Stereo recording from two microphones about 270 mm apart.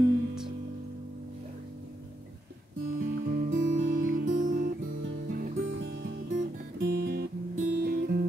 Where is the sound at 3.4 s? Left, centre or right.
Right.